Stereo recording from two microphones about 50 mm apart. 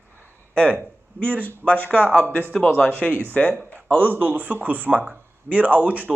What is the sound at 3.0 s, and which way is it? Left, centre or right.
Speech, right.